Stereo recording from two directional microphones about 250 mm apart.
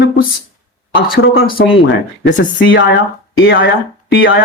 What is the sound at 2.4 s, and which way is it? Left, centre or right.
Speech, left.